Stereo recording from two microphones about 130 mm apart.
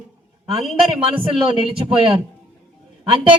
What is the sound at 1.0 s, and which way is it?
A man's voice, 40° right (ahead or behind).